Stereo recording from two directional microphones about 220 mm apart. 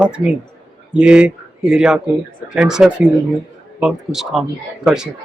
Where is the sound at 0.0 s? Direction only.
5° right (ahead or behind).